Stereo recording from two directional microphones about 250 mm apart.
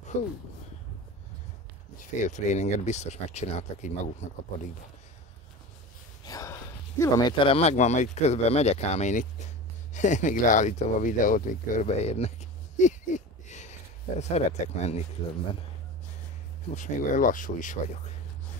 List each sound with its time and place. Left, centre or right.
0.1 s speech: left
2.0 s speech: left
6.2 s speech: centre
16.7 s speech: left